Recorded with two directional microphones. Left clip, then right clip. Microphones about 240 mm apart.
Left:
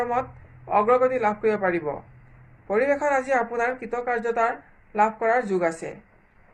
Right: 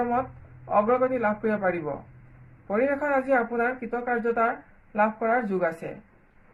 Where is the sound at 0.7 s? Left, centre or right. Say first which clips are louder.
Left 3 dB; left.